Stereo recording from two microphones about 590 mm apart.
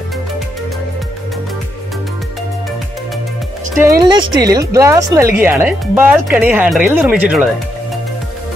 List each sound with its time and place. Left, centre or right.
3.8 s speech: centre